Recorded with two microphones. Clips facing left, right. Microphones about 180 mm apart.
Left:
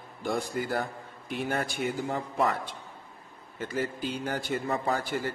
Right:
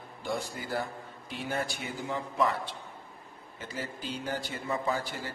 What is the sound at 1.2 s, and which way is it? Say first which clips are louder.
Speech: left 3 dB; 55° left (ahead or behind).